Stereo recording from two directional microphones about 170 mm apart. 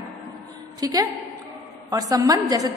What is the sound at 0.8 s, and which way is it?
A woman's voice, 20° right (ahead or behind).